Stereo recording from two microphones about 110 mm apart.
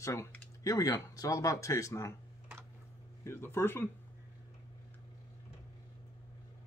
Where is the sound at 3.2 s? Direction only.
20° left (ahead or behind).